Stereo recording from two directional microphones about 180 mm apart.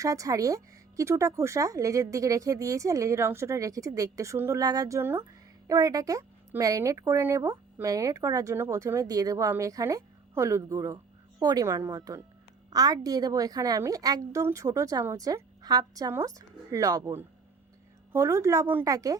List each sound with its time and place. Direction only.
0.0 s a woman's voice: 20° right (ahead or behind)